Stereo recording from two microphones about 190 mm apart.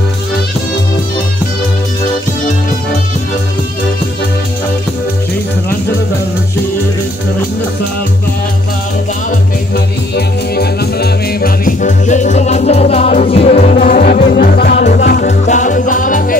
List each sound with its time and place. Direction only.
10.1 s music: 55° left (ahead or behind); by 13.6 s 35° left (ahead or behind)
13.7 s music: 45° left (ahead or behind)
14.3 s music: 55° left (ahead or behind)
15.4 s music: 40° left (ahead or behind)